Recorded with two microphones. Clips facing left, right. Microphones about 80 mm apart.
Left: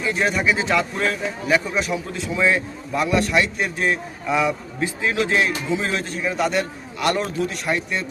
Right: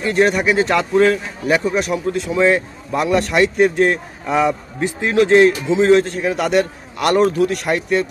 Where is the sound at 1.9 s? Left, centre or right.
Right.